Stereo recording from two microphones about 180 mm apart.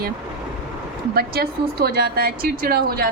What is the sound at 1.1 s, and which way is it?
A woman's voice, 60° right (ahead or behind).